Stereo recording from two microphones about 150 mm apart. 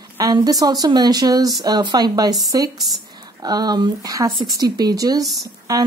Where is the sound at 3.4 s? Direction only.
25° right (ahead or behind).